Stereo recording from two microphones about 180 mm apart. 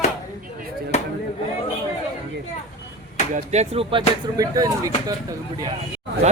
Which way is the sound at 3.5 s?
35° right (ahead or behind).